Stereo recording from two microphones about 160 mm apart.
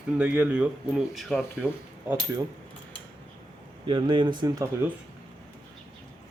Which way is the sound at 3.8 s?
30° right (ahead or behind).